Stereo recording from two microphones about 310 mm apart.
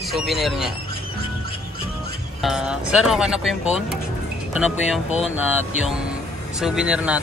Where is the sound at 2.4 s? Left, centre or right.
Centre.